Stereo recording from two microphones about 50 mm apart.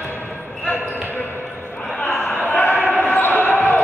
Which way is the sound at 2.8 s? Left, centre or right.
Left.